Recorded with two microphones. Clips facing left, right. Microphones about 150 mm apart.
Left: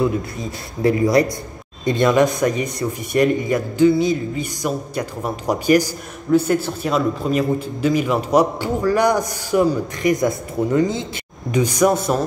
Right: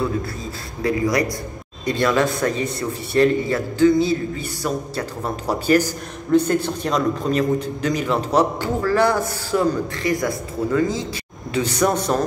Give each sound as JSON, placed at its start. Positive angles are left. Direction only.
{"t": 0.8, "sound": "a man's voice", "side_deg": 25}
{"t": 11.5, "sound": "a man's voice", "side_deg": 10}